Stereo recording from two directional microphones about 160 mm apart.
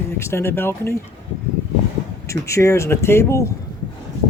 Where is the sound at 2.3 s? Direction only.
20° left (ahead or behind).